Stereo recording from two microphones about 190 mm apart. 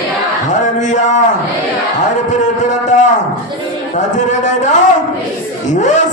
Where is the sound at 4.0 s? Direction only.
40° left (ahead or behind).